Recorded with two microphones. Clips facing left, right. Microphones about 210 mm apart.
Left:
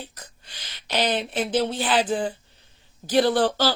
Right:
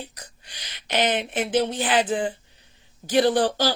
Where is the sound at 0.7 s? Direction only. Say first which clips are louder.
Right 1 dB; 45° right (ahead or behind).